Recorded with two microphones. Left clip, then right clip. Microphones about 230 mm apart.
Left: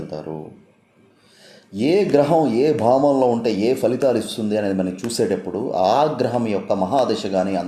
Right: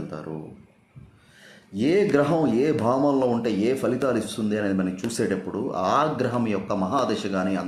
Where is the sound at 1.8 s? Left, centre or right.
Centre.